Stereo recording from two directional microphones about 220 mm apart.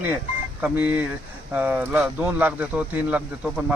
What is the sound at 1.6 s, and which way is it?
Speech, 5° right (ahead or behind).